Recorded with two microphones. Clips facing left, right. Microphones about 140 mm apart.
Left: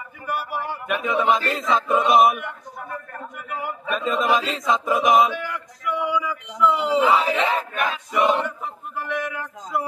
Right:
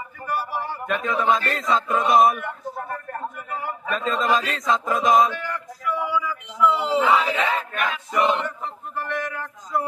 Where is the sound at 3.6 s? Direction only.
15° left (ahead or behind).